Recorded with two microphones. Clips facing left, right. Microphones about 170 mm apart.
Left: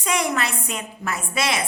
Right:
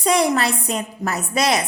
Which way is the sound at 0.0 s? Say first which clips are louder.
Right 6 dB; 35° right (ahead or behind).